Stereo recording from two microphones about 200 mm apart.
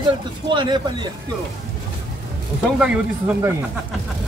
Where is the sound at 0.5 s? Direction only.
25° right (ahead or behind).